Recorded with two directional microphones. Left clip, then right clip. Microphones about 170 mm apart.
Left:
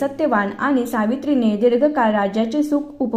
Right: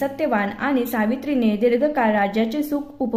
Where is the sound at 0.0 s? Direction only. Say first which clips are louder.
Left 3 dB; 5° right (ahead or behind).